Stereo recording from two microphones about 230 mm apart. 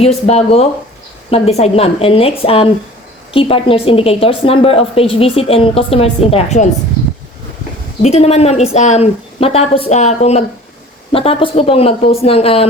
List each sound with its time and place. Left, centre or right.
0.0 s a woman's voice: left
8.0 s a woman's voice: left